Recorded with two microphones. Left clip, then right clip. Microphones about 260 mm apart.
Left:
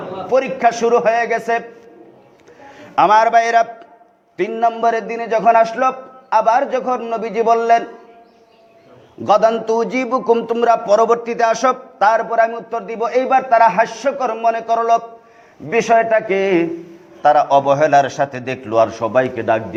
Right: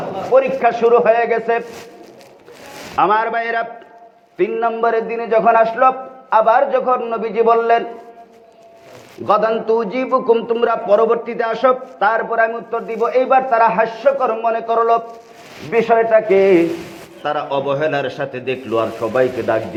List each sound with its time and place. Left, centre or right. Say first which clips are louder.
0.3 s a man's voice: right 1 dB; left
2.9 s a man's voice: left 4 dB; left
9.2 s a man's voice: left 2 dB; left